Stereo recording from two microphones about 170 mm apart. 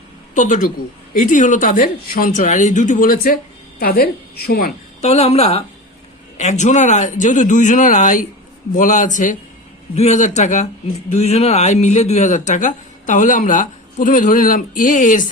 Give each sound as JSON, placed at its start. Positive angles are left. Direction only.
{"t": 0.3, "sound": "a man's voice", "side_deg": 50}
{"t": 4.9, "sound": "a man's voice", "side_deg": 40}